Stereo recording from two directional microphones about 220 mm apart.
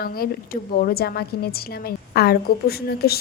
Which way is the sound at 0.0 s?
40° left (ahead or behind).